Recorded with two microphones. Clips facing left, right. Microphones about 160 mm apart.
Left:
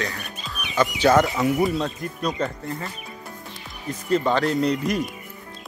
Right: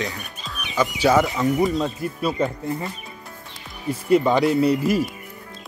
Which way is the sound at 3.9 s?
10° right (ahead or behind).